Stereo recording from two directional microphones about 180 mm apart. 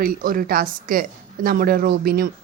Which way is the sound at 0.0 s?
50° right (ahead or behind).